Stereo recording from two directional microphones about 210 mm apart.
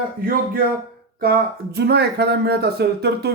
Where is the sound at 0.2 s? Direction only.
45° right (ahead or behind).